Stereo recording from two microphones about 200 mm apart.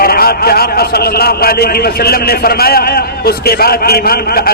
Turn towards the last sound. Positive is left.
turn(degrees=50)  # may be behind; listen again after turning